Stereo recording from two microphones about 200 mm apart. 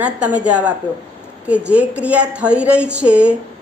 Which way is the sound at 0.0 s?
5° right (ahead or behind).